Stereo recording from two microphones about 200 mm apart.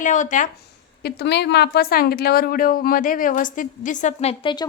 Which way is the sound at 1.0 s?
55° left (ahead or behind).